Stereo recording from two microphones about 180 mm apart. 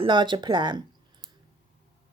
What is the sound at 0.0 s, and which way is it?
Speech, 25° right (ahead or behind).